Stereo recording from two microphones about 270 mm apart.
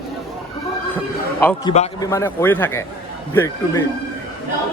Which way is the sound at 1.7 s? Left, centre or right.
Left.